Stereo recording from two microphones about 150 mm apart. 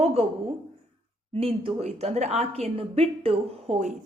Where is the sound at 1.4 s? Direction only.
40° right (ahead or behind).